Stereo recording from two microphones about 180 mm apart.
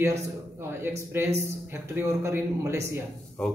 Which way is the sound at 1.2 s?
15° right (ahead or behind).